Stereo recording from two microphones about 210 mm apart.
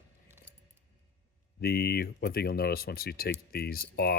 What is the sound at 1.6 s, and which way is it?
Speech, 50° left (ahead or behind).